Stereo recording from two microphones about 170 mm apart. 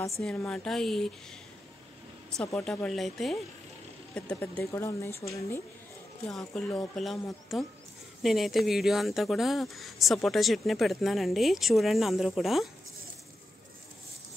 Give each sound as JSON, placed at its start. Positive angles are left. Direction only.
{"t": 0.2, "sound": "speech", "side_deg": 5}
{"t": 2.3, "sound": "speech", "side_deg": 5}
{"t": 6.2, "sound": "speech", "side_deg": 5}